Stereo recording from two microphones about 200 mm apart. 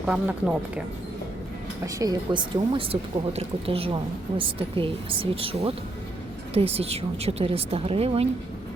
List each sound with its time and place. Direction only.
0.0 s a woman's voice: 5° right (ahead or behind)
1.8 s speech: 20° right (ahead or behind)